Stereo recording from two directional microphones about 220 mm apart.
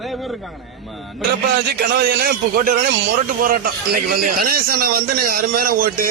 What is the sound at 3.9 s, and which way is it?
A man's voice, 40° right (ahead or behind).